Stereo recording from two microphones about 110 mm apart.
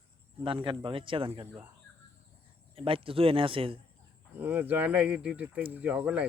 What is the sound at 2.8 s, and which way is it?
Speech, 55° right (ahead or behind).